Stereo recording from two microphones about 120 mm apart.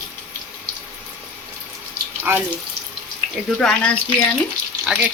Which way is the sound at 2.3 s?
15° right (ahead or behind).